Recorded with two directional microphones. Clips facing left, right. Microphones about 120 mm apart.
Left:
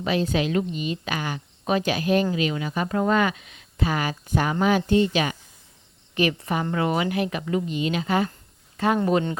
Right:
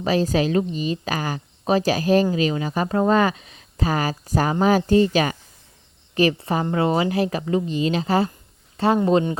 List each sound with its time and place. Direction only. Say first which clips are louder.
0.0 s speech: right 3 dB; 35° right (ahead or behind)